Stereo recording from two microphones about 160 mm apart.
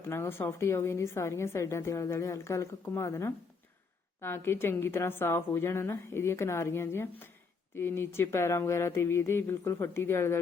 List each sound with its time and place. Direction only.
0.1 s a woman's voice: 15° left (ahead or behind)